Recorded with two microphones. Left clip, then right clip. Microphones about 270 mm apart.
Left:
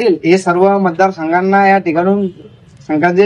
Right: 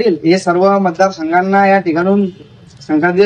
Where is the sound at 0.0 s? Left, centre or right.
Left.